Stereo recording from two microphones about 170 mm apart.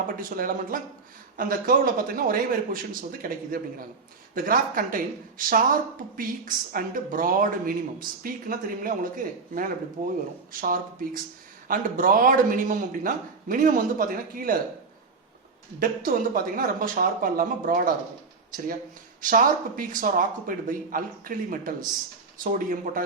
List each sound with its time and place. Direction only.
0.2 s a man's voice: 55° right (ahead or behind)
15.8 s a man's voice: 55° right (ahead or behind)
19.2 s a man's voice: 50° right (ahead or behind)